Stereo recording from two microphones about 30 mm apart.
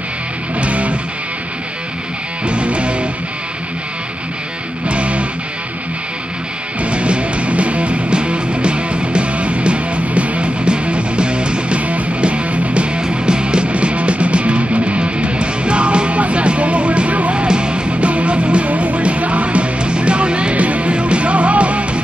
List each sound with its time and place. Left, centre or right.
0.6 s music: right
2.4 s music: right
4.8 s music: right
6.8 s music: right
11.8 s music: right
13.1 s music: right
17.5 s music: right
20.5 s music: right